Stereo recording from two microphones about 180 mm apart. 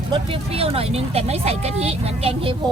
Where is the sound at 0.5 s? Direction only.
35° right (ahead or behind).